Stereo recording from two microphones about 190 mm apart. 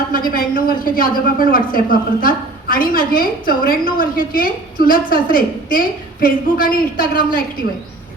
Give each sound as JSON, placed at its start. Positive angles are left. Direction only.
{"t": 0.1, "sound": "a woman's voice", "side_deg": 50}